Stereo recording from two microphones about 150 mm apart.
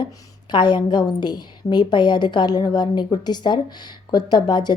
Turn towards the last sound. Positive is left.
turn(degrees=30)  # may be behind; listen again after turning